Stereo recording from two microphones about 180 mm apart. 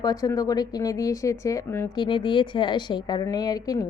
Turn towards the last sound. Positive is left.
turn(degrees=20)  # may be behind; listen again after turning